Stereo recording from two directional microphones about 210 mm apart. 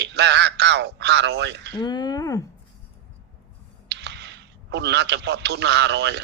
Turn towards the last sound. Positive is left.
turn(degrees=-55)  # may be behind; listen again after turning